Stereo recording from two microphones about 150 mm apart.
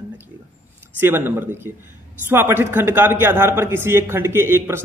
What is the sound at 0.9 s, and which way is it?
A man's voice, 15° right (ahead or behind).